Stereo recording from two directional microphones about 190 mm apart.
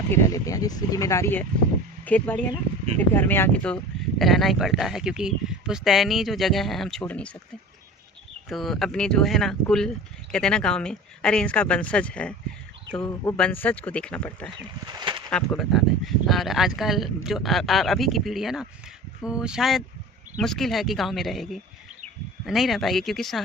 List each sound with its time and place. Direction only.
0.1 s speech: 15° left (ahead or behind)
8.4 s speech: centre (ahead or behind)
13.3 s speech: 10° left (ahead or behind)
14.8 s a sound: 25° right (ahead or behind)
15.3 s speech: centre (ahead or behind)